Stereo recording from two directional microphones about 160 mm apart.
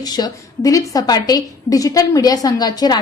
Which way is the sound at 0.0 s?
25° left (ahead or behind).